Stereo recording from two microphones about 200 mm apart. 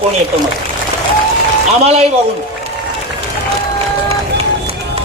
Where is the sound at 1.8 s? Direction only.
30° right (ahead or behind).